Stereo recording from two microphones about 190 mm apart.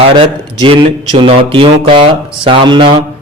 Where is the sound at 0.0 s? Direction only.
30° right (ahead or behind).